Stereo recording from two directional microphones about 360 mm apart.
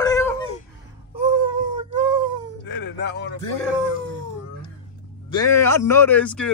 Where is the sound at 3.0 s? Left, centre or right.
Left.